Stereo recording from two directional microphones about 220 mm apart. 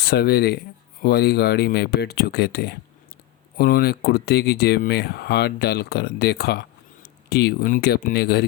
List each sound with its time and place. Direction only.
0.0 s speech: 45° left (ahead or behind)